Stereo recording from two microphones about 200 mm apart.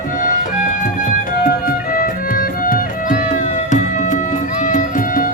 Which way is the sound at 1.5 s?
45° left (ahead or behind).